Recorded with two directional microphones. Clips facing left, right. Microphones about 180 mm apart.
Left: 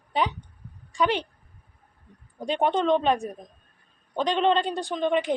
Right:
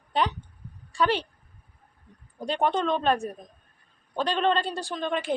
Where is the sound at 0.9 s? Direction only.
15° left (ahead or behind).